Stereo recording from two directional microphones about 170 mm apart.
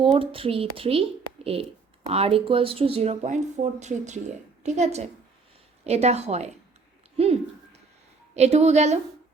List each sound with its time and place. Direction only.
0.0 s speech: 30° right (ahead or behind)
8.4 s speech: 40° right (ahead or behind)